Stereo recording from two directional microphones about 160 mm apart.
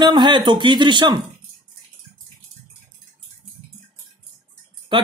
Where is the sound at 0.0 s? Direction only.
25° right (ahead or behind).